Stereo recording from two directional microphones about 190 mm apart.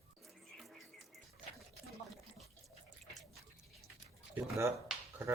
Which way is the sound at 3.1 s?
Centre (ahead or behind).